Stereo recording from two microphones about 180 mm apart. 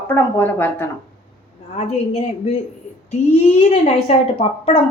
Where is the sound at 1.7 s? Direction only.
35° left (ahead or behind).